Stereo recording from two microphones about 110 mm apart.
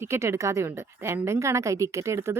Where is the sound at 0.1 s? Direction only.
25° right (ahead or behind).